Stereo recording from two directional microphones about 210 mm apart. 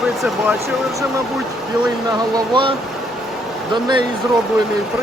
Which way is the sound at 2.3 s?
20° right (ahead or behind).